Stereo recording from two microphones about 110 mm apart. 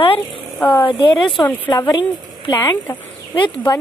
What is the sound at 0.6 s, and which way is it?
Speech, 15° left (ahead or behind).